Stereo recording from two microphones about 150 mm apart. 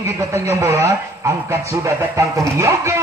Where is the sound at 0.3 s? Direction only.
20° right (ahead or behind).